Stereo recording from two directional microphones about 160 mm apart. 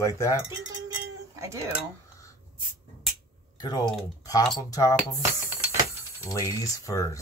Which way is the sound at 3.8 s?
Centre (ahead or behind).